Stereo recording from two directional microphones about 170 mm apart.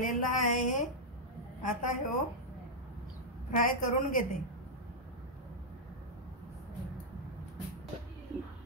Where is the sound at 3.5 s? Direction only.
50° left (ahead or behind).